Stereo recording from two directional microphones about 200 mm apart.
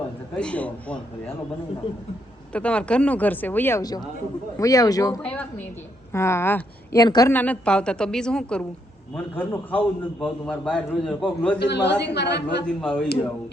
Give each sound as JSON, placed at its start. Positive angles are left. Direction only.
{"t": 0.3, "sound": "a man's voice", "side_deg": 5}
{"t": 2.5, "sound": "a woman's voice", "side_deg": 5}
{"t": 11.6, "sound": "a woman's voice", "side_deg": 55}
{"t": 12.6, "sound": "a man's voice", "side_deg": 5}